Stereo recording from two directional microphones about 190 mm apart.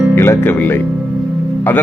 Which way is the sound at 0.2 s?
10° left (ahead or behind).